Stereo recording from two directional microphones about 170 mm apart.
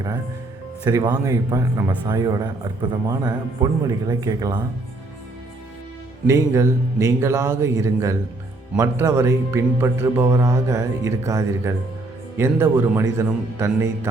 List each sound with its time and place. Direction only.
0.9 s a man's voice: 20° right (ahead or behind)
6.2 s speech: 15° right (ahead or behind)